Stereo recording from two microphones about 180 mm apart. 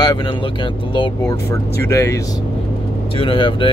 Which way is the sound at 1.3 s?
15° left (ahead or behind).